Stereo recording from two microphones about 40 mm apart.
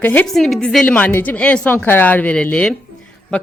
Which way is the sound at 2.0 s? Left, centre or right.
Left.